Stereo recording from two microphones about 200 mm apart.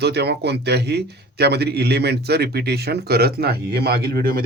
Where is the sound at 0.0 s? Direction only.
55° right (ahead or behind).